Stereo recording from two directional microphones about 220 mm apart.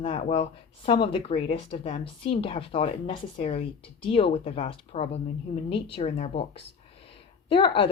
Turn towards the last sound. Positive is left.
turn(degrees=25)  # may be behind; listen again after turning